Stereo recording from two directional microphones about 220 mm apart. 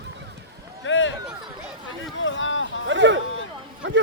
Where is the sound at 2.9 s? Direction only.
55° right (ahead or behind).